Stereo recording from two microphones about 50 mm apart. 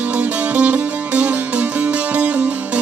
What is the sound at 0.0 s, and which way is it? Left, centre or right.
Music, right.